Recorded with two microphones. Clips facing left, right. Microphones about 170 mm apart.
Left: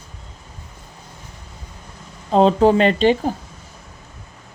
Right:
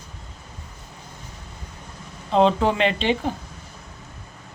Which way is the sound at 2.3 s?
40° left (ahead or behind).